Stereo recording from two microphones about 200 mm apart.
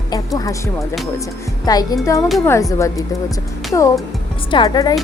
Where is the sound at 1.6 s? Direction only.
20° left (ahead or behind).